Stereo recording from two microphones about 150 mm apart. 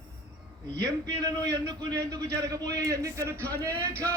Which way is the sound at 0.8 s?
25° right (ahead or behind).